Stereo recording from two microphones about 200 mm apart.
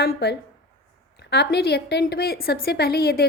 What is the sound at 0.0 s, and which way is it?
A woman's voice, 50° left (ahead or behind).